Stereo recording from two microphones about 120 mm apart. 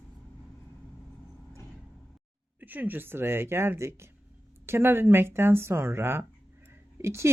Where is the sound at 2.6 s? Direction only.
15° right (ahead or behind).